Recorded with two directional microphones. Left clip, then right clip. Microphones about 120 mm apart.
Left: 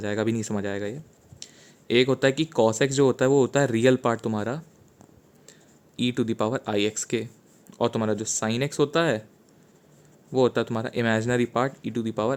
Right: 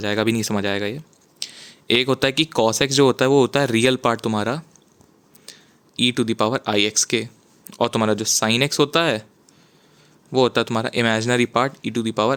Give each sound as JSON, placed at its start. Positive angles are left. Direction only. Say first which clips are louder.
{"t": 0.0, "sound": "speech", "louder": "right 6 dB", "side_deg": -20}
{"t": 5.5, "sound": "a sound", "louder": "right 11 dB", "side_deg": -20}
{"t": 6.0, "sound": "speech", "louder": "right 6 dB", "side_deg": -20}
{"t": 10.3, "sound": "speech", "louder": "right 5 dB", "side_deg": -25}